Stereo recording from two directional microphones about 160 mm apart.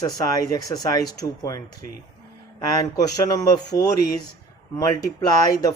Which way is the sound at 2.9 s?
20° left (ahead or behind).